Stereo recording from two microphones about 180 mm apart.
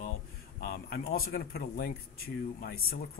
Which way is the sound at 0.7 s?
60° left (ahead or behind).